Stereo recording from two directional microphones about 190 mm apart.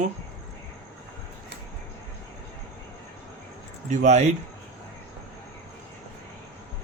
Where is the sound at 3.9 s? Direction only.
40° right (ahead or behind).